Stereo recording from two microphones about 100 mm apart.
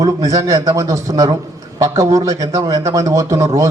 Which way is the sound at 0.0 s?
35° right (ahead or behind).